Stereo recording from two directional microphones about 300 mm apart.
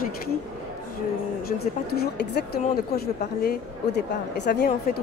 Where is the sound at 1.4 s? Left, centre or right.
Left.